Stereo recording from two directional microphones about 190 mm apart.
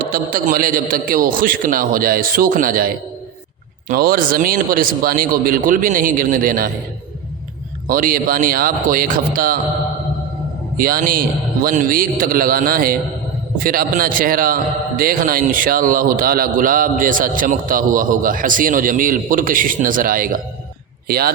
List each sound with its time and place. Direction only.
0.0 s a man's voice: 50° right (ahead or behind)
7.9 s a man's voice: 45° right (ahead or behind)
10.8 s a man's voice: 50° right (ahead or behind)